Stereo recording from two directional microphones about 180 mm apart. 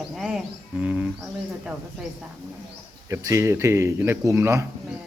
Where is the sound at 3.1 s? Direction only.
15° right (ahead or behind).